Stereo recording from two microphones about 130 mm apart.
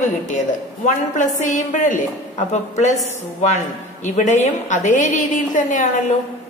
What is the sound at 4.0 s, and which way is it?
A woman's voice, 70° left (ahead or behind).